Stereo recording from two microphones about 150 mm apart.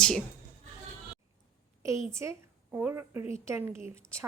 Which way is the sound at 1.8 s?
20° right (ahead or behind).